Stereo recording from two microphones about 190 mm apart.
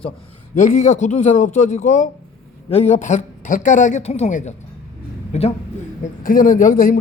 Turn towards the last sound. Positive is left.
turn(degrees=45)  # may be behind; listen again after turning